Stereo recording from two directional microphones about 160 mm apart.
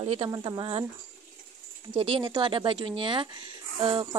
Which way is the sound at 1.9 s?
30° right (ahead or behind).